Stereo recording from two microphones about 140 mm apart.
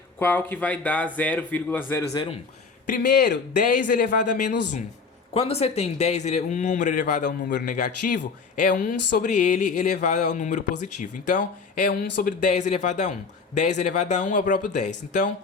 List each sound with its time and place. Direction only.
0.2 s speech: 15° left (ahead or behind)
2.8 s speech: 65° left (ahead or behind)
5.3 s speech: 45° left (ahead or behind)